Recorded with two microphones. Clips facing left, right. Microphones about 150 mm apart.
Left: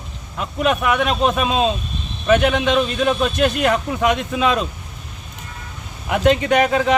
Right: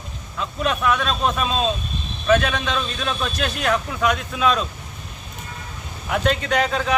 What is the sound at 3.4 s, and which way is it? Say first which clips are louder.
Speech: left 4 dB; 20° left (ahead or behind).